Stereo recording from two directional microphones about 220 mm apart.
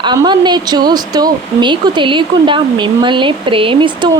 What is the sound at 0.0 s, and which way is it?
Speech, 20° right (ahead or behind).